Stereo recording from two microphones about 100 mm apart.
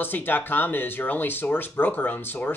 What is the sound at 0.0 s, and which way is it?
Speech, 20° left (ahead or behind).